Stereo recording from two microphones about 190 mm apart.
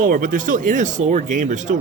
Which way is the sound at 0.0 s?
45° right (ahead or behind).